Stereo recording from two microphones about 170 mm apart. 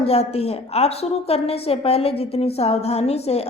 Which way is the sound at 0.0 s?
35° left (ahead or behind).